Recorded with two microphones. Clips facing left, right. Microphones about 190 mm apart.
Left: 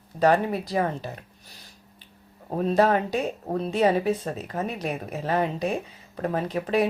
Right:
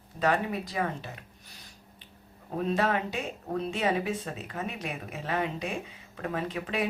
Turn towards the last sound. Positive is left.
turn(degrees=40)  # may be behind; listen again after turning